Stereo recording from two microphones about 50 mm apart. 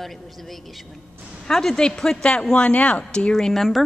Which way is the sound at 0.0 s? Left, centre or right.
Centre.